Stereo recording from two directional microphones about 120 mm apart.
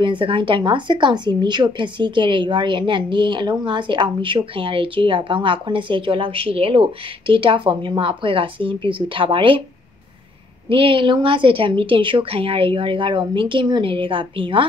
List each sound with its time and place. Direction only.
0.0 s a woman's voice: 45° right (ahead or behind)
10.7 s a woman's voice: 45° right (ahead or behind)